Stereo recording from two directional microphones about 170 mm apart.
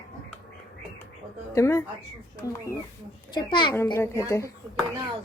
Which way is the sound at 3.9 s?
15° left (ahead or behind).